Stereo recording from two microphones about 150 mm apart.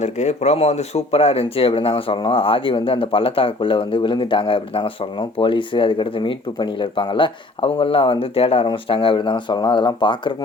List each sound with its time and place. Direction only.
0.0 s speech: 50° left (ahead or behind); by 10.3 s 35° left (ahead or behind)